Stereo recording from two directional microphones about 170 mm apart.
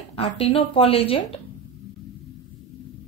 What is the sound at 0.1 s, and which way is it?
A woman's voice, 35° left (ahead or behind).